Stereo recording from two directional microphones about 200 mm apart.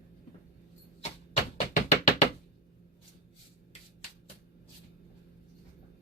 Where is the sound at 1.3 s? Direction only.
35° left (ahead or behind).